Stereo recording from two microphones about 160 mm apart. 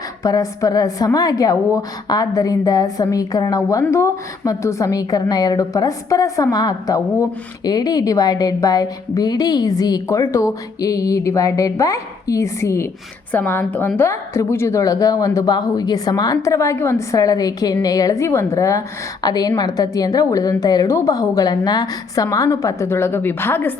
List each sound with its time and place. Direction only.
0.2 s a woman's voice: 20° left (ahead or behind)